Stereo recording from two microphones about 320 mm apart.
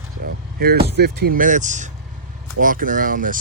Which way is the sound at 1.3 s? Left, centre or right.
Right.